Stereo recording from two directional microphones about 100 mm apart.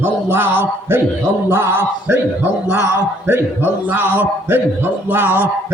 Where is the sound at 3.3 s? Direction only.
20° right (ahead or behind).